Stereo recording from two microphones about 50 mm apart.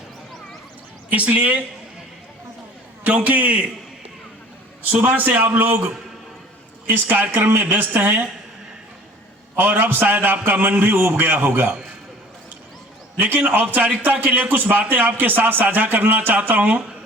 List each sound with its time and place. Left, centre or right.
1.1 s a man's voice: right
3.0 s a man's voice: right
4.8 s a man's voice: right
6.8 s a man's voice: right
7.3 s a man's voice: right
9.6 s a man's voice: right
13.1 s a man's voice: right